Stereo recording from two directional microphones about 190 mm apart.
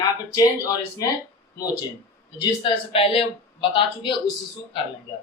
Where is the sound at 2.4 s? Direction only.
30° left (ahead or behind).